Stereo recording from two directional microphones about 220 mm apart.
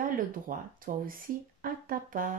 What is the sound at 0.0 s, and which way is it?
Speech, 40° right (ahead or behind).